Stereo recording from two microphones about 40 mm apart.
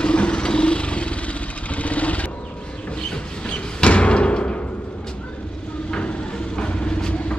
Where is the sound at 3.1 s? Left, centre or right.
Left.